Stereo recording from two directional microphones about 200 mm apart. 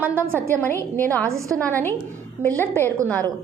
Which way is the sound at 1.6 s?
10° left (ahead or behind).